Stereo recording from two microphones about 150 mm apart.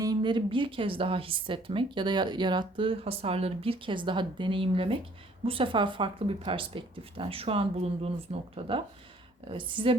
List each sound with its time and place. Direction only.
0.0 s speech: 25° right (ahead or behind)